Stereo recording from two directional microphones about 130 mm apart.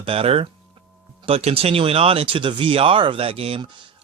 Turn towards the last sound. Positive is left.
turn(degrees=-50)  # may be behind; listen again after turning